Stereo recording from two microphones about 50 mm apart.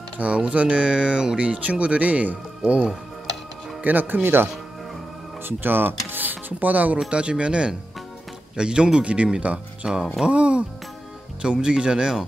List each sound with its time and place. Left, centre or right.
0.2 s speech: right
3.8 s speech: right
7.1 s speech: right